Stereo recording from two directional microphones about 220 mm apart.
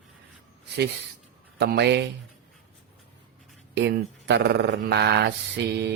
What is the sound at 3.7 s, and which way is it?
Speech, 50° right (ahead or behind).